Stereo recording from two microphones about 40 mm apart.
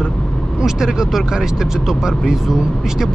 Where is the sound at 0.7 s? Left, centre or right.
Centre.